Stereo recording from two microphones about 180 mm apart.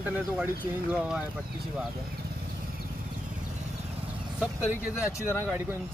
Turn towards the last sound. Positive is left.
turn(degrees=15)  # may be behind; listen again after turning